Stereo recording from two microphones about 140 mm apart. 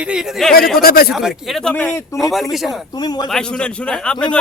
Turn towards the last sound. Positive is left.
turn(degrees=5)  # may be behind; listen again after turning